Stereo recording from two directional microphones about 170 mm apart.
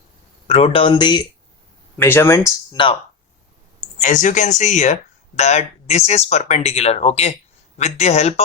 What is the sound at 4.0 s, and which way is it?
Speech, 45° left (ahead or behind).